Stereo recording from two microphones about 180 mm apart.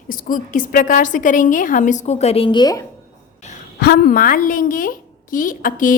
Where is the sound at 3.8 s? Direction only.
55° left (ahead or behind).